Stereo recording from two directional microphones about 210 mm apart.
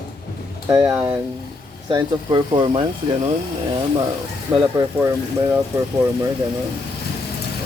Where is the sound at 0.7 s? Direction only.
15° right (ahead or behind).